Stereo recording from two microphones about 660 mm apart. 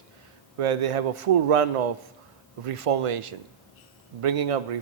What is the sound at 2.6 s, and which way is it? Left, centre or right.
A man's voice, right.